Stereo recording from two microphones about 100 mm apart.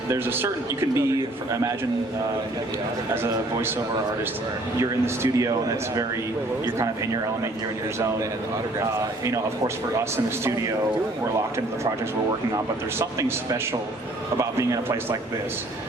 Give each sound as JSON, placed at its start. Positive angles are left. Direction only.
{"t": 0.1, "sound": "speech", "side_deg": -25}
{"t": 4.8, "sound": "speech", "side_deg": -30}
{"t": 6.7, "sound": "speech", "side_deg": -30}
{"t": 8.8, "sound": "a man's voice", "side_deg": -35}
{"t": 13.0, "sound": "a man's voice", "side_deg": -30}